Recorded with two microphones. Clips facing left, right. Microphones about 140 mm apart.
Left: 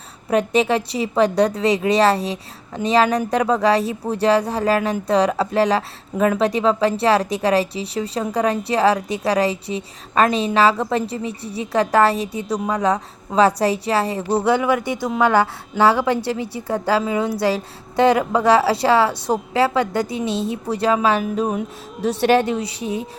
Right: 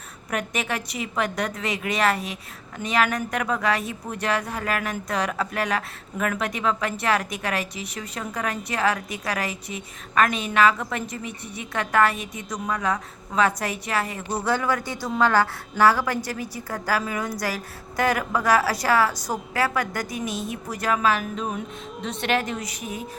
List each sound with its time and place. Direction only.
0.3 s a woman's voice: 30° left (ahead or behind)